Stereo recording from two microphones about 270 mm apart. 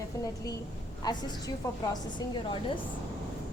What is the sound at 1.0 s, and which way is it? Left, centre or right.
A woman's voice, centre.